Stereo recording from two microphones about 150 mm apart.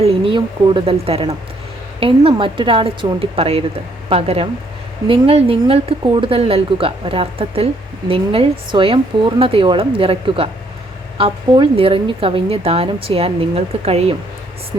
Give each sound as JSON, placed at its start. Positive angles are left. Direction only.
{"t": 0.0, "sound": "speech", "side_deg": -40}